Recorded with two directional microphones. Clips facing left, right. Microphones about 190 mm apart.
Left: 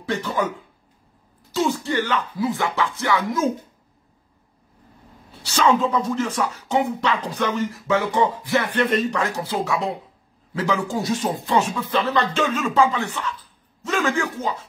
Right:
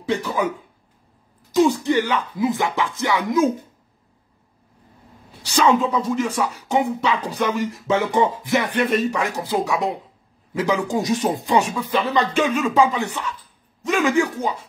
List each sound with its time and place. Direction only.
0.0 s speech: 10° right (ahead or behind)
1.5 s speech: 15° right (ahead or behind)
5.4 s speech: 15° right (ahead or behind)